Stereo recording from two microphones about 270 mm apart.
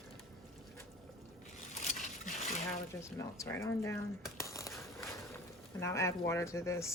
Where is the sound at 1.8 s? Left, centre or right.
Left.